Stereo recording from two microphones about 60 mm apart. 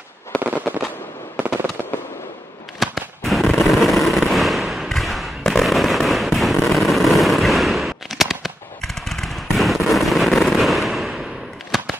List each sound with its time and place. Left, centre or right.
0.3 s fireworks: centre
2.8 s fireworks: centre
11.7 s a sound: centre